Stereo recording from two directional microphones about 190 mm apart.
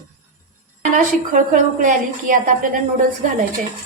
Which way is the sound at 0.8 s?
45° right (ahead or behind).